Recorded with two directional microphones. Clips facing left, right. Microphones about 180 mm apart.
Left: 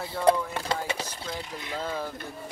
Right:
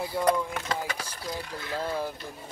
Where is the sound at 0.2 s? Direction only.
30° left (ahead or behind).